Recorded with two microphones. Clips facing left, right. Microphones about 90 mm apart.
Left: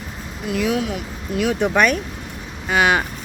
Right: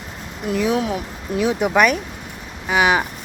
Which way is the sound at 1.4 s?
15° right (ahead or behind).